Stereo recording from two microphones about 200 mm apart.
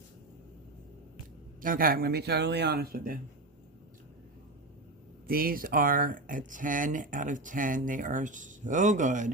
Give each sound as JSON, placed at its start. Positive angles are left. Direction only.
{"t": 1.6, "sound": "speech", "side_deg": -45}
{"t": 5.3, "sound": "speech", "side_deg": -50}